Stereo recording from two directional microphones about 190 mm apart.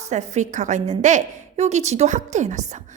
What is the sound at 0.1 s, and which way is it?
A woman's voice, 40° right (ahead or behind).